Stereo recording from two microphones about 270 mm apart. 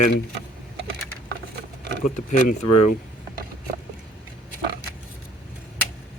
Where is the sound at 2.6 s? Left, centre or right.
Left.